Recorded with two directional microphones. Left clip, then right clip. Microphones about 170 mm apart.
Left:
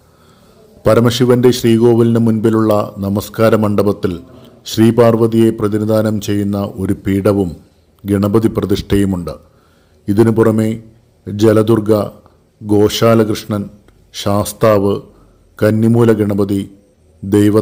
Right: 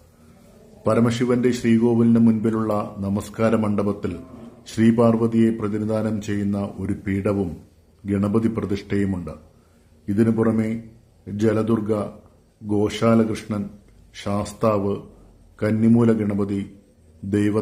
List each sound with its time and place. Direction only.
0.8 s a man's voice: 40° left (ahead or behind)